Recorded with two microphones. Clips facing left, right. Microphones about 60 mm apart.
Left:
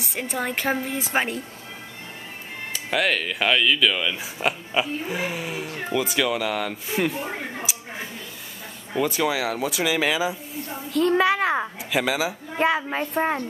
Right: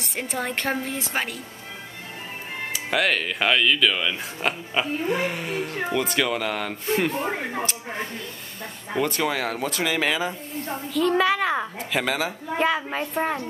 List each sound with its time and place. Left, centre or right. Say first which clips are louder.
0.0 s speech: left 1 dB; centre
1.1 s speech: left 5 dB; left
2.7 s a woman's voice: even; centre